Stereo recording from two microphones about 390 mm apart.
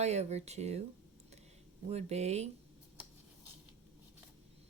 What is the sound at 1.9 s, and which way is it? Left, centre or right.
Speech, centre.